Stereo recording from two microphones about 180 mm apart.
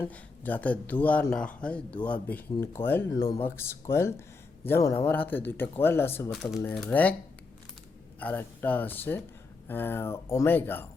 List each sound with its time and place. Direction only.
0.0 s speech: 10° left (ahead or behind)
6.3 s speech: centre (ahead or behind)
8.2 s speech: 10° left (ahead or behind)